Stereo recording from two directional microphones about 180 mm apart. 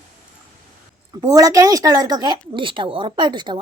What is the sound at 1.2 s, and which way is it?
Speech, 20° right (ahead or behind).